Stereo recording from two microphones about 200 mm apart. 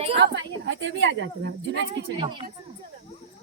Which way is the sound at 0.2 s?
65° right (ahead or behind).